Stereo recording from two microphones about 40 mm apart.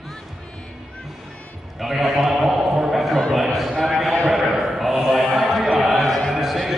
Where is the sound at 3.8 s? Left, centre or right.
Centre.